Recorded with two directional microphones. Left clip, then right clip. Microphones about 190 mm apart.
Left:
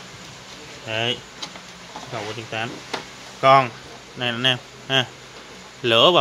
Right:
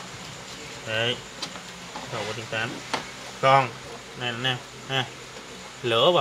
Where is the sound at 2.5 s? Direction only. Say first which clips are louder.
Even; 40° left (ahead or behind).